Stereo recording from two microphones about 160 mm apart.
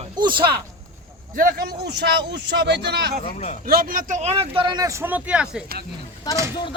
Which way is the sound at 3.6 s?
65° right (ahead or behind).